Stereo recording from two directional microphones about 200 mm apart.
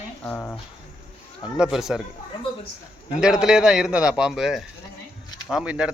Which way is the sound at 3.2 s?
5° right (ahead or behind).